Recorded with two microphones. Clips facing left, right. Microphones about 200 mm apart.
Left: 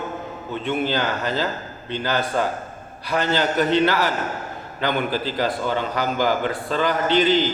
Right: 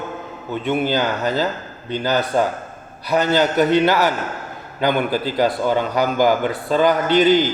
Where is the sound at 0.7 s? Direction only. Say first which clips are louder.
Right 3 dB; 40° right (ahead or behind).